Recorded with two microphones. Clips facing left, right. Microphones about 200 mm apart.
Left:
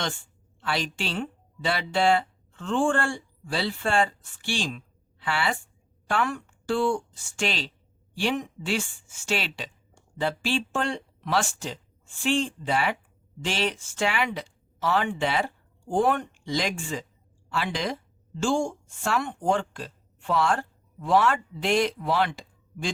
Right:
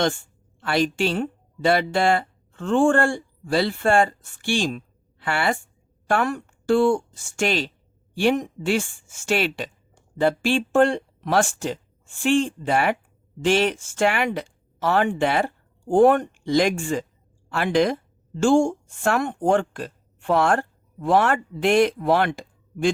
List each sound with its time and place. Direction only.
0.6 s a woman's voice: 50° right (ahead or behind)